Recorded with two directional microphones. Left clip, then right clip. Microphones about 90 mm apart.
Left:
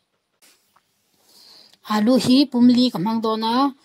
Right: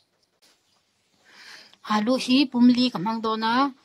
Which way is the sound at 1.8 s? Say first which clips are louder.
Left 4 dB; 40° left (ahead or behind).